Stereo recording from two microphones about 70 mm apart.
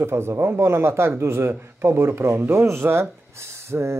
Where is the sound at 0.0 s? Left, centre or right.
Right.